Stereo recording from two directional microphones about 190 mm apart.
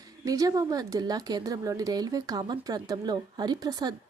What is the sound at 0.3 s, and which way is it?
Speech, 20° right (ahead or behind).